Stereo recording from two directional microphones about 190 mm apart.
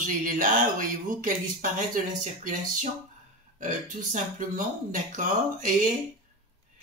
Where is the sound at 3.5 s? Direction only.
45° right (ahead or behind).